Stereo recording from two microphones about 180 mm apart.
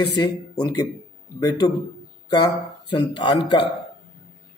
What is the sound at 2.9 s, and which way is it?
Speech, 25° left (ahead or behind).